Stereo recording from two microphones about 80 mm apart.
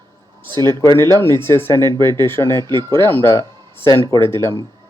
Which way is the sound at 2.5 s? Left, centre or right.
Right.